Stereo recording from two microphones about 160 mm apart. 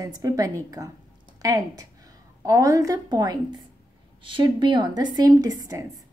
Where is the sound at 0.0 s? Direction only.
20° right (ahead or behind).